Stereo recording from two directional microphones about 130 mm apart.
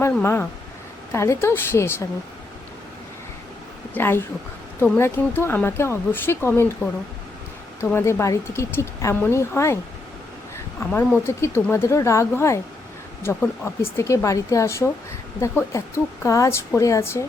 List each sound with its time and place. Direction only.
0.2 s speech: 20° left (ahead or behind)
3.9 s speech: 15° left (ahead or behind)
7.9 s speech: 20° left (ahead or behind)
10.8 s speech: 15° left (ahead or behind)